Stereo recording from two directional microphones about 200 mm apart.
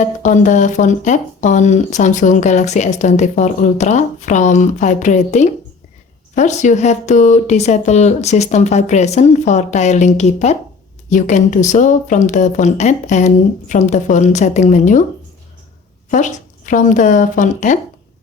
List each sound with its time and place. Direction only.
0.0 s speech: 40° left (ahead or behind)
16.0 s speech: 40° left (ahead or behind)